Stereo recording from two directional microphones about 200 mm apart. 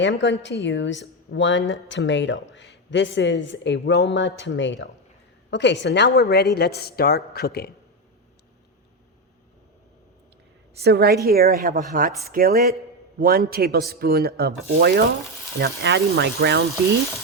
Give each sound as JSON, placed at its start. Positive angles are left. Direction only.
{"t": 0.0, "sound": "a woman's voice", "side_deg": 65}
{"t": 10.8, "sound": "speech", "side_deg": -50}